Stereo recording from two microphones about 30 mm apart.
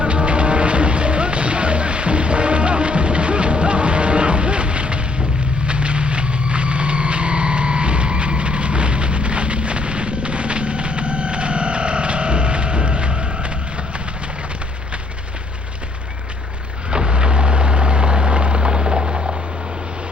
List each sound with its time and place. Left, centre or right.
0.0 s music: right
5.6 s a sound: right
16.9 s vehicle: right